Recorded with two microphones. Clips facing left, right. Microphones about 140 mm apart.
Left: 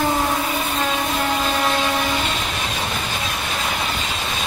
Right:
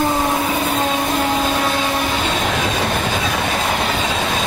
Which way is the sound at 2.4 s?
85° right.